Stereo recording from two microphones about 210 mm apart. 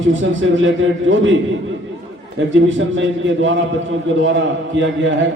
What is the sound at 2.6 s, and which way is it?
Speech, 65° right (ahead or behind).